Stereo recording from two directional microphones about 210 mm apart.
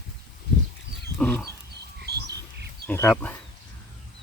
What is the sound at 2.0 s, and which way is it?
Squawk, 50° right (ahead or behind).